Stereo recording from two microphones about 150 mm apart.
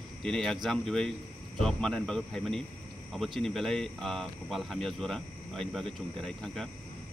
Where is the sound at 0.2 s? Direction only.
5° left (ahead or behind).